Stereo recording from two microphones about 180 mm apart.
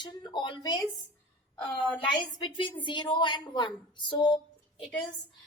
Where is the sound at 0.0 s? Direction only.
25° left (ahead or behind).